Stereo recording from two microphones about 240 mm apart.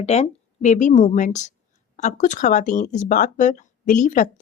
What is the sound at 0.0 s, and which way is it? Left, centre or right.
A woman's voice, left.